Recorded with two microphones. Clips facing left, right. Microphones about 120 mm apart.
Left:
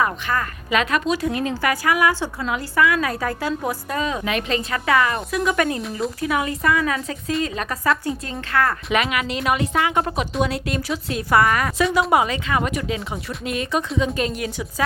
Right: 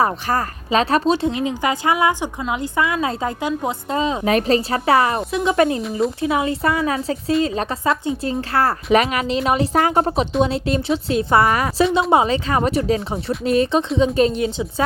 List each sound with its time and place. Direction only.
0.0 s a woman's voice: 35° right (ahead or behind)
4.3 s a woman's voice: 35° right (ahead or behind)